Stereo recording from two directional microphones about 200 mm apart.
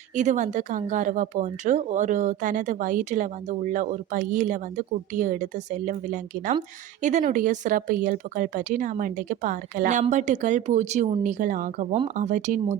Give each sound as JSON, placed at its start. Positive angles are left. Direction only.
{"t": 0.2, "sound": "speech", "side_deg": -35}